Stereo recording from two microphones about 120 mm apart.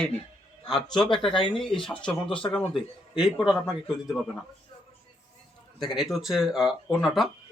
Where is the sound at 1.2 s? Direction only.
45° left (ahead or behind).